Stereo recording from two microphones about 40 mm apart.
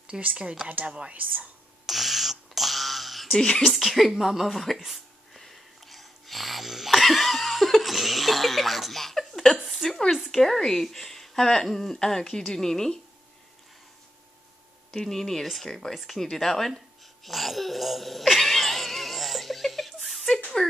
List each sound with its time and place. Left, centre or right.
0.1 s speech: centre
0.7 s speech: right
1.9 s a sound: centre
3.3 s speech: centre
3.7 s speech: centre
5.4 s wheeze: centre
6.9 s laughter: centre
9.6 s a sound: centre
9.8 s a sound: centre
10.1 s speech: centre
14.9 s speech: centre
15.9 s babbling: centre
20.6 s speech: left